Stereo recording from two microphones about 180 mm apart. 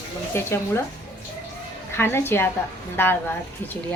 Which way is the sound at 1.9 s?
15° left (ahead or behind).